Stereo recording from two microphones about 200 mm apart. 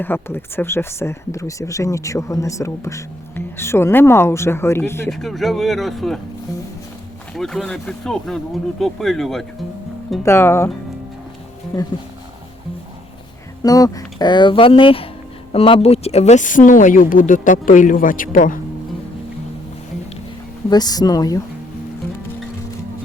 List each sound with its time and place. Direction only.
0.0 s speech: 10° left (ahead or behind)
5.1 s speech: centre (ahead or behind)
7.3 s speech: centre (ahead or behind)
10.2 s speech: 10° left (ahead or behind)
13.6 s speech: 20° left (ahead or behind); by 18.6 s 40° left (ahead or behind)
20.7 s speech: 20° left (ahead or behind)